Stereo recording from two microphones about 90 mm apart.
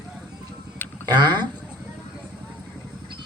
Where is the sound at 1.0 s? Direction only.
50° right (ahead or behind).